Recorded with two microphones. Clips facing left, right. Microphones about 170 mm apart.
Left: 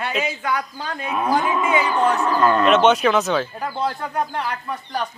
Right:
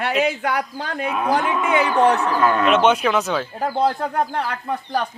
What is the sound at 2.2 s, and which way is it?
Speech, 5° right (ahead or behind).